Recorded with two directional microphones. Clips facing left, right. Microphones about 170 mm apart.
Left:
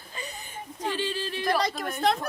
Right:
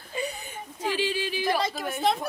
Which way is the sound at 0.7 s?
10° right (ahead or behind).